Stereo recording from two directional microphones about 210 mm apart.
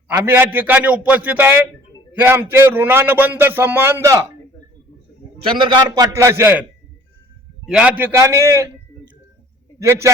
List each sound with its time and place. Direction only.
0.1 s speech: 10° right (ahead or behind)
5.4 s speech: 25° right (ahead or behind)
7.7 s speech: 5° right (ahead or behind)
9.7 s a man's voice: 15° right (ahead or behind)